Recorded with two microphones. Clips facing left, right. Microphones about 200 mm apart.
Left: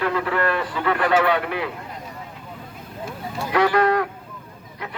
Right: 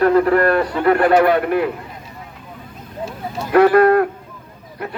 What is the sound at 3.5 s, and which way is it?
Speech, 55° right (ahead or behind).